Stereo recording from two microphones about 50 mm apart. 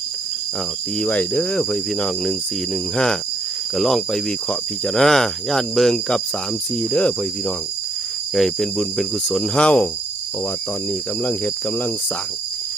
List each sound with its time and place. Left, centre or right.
0.9 s cricket: left
1.7 s speech: centre
6.7 s cricket: left
8.4 s speech: centre
9.6 s cricket: left
11.2 s cricket: left